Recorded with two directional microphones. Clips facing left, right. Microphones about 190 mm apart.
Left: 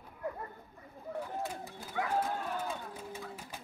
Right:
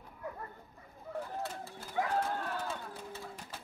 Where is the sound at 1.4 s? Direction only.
15° left (ahead or behind).